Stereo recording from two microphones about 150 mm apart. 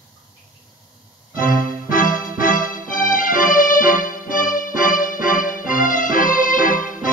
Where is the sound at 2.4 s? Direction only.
65° left (ahead or behind).